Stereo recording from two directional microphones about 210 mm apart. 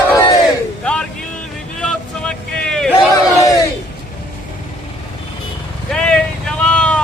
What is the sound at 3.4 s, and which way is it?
Crowd, 15° left (ahead or behind).